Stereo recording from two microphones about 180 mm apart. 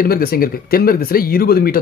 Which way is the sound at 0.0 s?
55° left (ahead or behind).